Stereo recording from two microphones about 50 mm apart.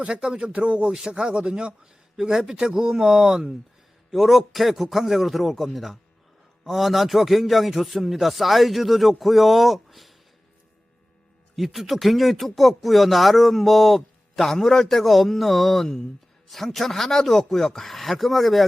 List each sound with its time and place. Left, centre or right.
0.0 s a man's voice: centre
11.5 s speech: centre